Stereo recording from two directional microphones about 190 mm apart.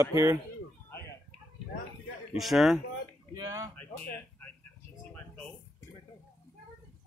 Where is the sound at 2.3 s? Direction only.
Centre (ahead or behind).